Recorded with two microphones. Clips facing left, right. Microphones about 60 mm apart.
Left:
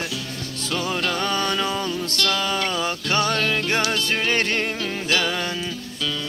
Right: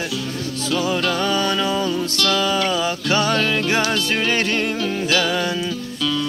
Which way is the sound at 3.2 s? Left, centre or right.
Right.